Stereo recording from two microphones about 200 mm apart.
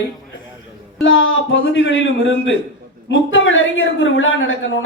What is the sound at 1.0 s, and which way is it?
A woman's voice, 75° left (ahead or behind).